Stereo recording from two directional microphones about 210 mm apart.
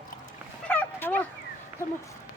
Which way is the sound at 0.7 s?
10° left (ahead or behind).